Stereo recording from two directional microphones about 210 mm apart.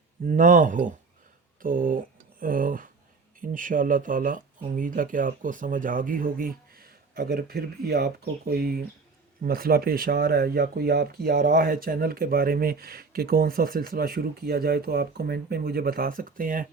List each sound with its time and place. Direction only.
0.3 s speech: 40° right (ahead or behind)